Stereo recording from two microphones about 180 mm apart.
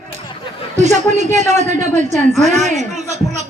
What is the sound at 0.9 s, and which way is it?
A man's voice, 40° right (ahead or behind).